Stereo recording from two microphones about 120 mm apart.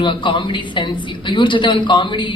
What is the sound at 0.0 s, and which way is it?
A woman's voice, 40° left (ahead or behind).